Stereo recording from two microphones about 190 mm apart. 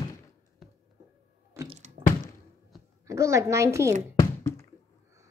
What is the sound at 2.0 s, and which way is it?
Thunk, 30° right (ahead or behind).